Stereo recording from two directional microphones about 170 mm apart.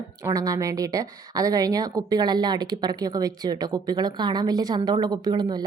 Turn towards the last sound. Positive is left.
turn(degrees=-25)  # may be behind; listen again after turning